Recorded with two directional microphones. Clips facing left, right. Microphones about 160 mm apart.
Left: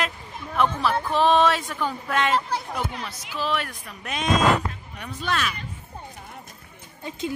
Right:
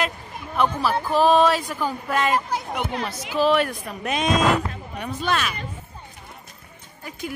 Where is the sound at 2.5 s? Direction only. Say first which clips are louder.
Right 2 dB; 20° right (ahead or behind).